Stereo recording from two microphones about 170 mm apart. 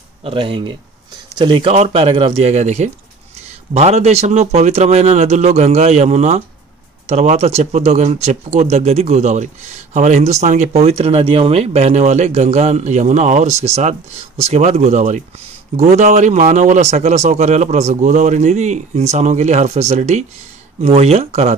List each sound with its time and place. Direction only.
0.2 s speech: 30° right (ahead or behind)